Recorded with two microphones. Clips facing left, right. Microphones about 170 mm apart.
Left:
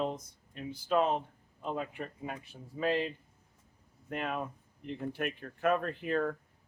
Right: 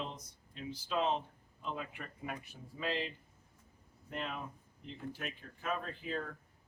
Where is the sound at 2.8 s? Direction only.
45° left (ahead or behind).